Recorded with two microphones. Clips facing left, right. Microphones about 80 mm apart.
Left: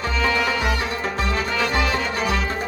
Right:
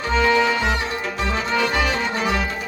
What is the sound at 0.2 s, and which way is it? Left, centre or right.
Music, centre.